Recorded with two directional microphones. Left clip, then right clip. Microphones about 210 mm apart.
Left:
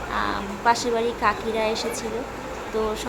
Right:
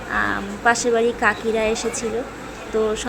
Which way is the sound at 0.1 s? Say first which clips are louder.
Right 5 dB; 15° right (ahead or behind).